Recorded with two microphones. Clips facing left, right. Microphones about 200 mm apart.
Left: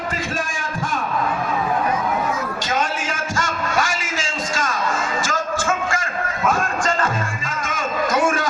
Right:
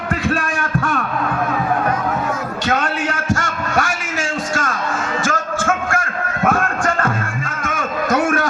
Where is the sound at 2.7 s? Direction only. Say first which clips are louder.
Right 5 dB; 65° right (ahead or behind).